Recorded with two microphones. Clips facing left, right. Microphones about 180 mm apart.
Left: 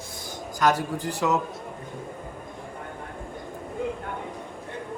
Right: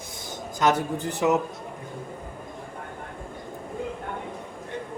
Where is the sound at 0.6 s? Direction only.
20° right (ahead or behind).